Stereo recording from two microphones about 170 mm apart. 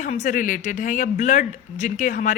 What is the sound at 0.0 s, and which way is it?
Speech, 50° left (ahead or behind).